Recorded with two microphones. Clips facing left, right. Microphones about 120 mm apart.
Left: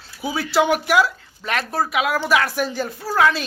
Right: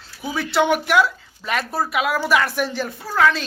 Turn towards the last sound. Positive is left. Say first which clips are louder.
# even
turn(degrees=5)  # may be behind; listen again after turning